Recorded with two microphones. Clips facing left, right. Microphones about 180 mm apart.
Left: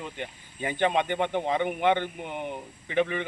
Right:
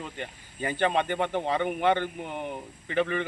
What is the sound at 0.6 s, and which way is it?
A man's voice, 15° left (ahead or behind).